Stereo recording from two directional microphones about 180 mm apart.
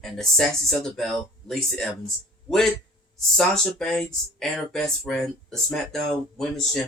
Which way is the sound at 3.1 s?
Centre (ahead or behind).